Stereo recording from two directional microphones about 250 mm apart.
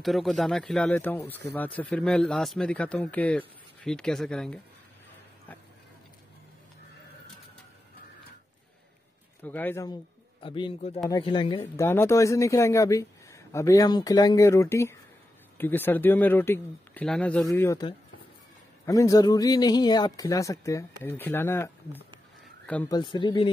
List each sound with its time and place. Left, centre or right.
0.0 s speech: centre
9.4 s speech: centre
22.7 s speech: centre
22.9 s speech: centre